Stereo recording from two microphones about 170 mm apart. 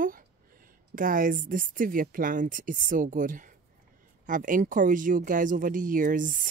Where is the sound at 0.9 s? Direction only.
55° right (ahead or behind).